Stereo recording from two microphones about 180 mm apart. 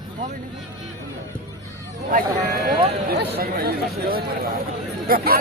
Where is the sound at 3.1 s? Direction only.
60° right (ahead or behind).